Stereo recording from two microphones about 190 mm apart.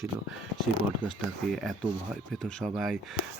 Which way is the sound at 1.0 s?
25° left (ahead or behind).